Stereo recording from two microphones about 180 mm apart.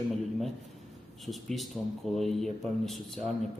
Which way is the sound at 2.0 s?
Centre (ahead or behind).